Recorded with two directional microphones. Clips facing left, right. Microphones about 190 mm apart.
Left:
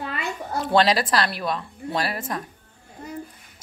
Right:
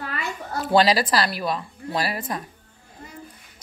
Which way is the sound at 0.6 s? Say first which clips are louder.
Right 1 dB; 5° right (ahead or behind).